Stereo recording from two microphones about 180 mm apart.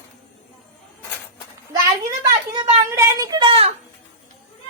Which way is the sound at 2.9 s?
20° right (ahead or behind).